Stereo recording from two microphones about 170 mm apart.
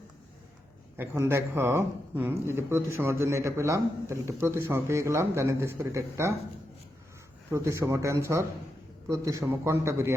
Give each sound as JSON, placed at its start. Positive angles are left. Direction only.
{"t": 0.9, "sound": "speech", "side_deg": -15}
{"t": 7.5, "sound": "speech", "side_deg": -15}